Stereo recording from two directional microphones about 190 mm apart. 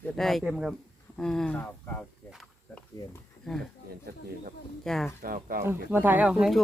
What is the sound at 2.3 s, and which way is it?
Snake, centre (ahead or behind).